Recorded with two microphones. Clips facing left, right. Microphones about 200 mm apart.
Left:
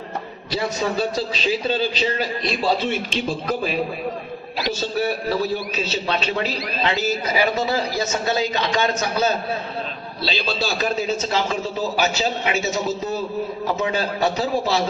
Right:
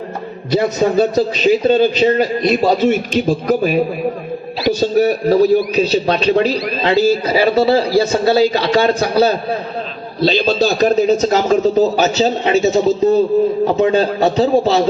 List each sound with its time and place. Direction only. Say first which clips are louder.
0.5 s a man's voice: right 9 dB; 45° right (ahead or behind)